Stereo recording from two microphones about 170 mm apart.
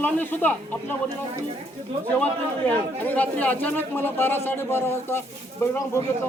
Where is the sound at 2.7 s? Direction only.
10° left (ahead or behind).